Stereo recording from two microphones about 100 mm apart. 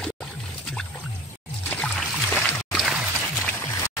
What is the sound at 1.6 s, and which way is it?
Music, 15° left (ahead or behind).